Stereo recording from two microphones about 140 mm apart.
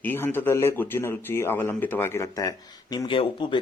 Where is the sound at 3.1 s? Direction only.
35° left (ahead or behind).